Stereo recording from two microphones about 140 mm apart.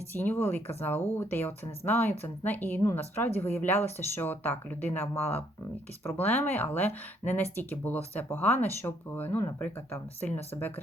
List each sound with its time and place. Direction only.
0.1 s speech: 15° left (ahead or behind)